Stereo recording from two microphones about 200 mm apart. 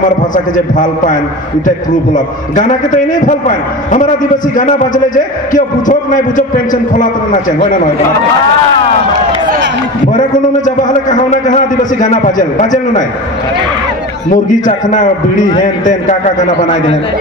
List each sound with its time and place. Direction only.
0.0 s a man's voice: 40° left (ahead or behind)
2.1 s a man's voice: 40° left (ahead or behind)
10.1 s a man's voice: 40° left (ahead or behind)
14.3 s a man's voice: 40° left (ahead or behind)